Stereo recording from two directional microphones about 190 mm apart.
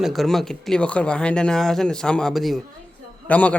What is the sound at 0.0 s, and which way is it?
Speech, centre (ahead or behind).